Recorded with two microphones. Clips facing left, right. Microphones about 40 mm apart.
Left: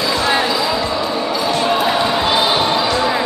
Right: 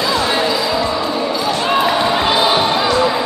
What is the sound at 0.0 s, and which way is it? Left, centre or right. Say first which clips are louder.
Basketball bounce: even; centre.